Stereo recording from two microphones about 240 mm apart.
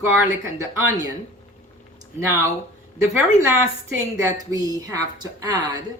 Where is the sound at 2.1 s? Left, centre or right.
Centre.